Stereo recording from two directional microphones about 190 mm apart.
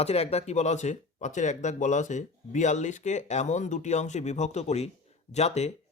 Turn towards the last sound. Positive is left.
turn(degrees=35)  # may be behind; listen again after turning